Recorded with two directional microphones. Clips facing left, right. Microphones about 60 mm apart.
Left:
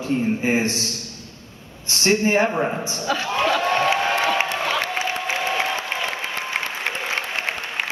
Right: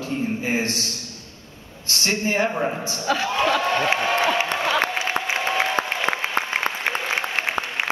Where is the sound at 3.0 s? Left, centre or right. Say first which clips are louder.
Right 1 dB; centre.